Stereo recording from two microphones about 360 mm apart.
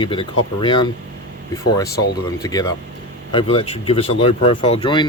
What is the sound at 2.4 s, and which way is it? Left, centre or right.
Speech, centre.